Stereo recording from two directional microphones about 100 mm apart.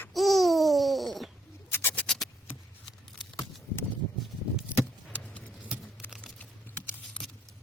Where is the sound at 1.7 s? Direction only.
20° left (ahead or behind).